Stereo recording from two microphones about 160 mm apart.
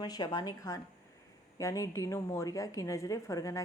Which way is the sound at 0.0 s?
25° left (ahead or behind).